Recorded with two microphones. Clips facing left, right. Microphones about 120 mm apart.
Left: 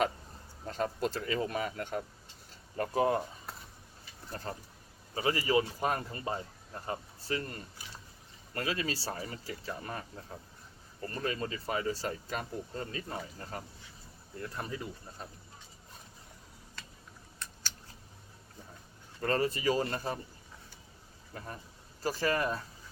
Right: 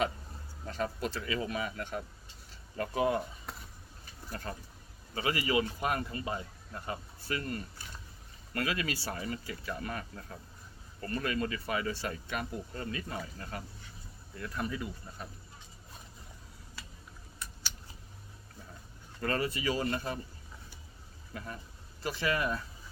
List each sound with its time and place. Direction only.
0.7 s speech: 40° left (ahead or behind)
5.1 s speech: 30° left (ahead or behind)
16.8 s a sound: 10° right (ahead or behind)
19.2 s speech: 35° left (ahead or behind)
21.3 s speech: 35° left (ahead or behind)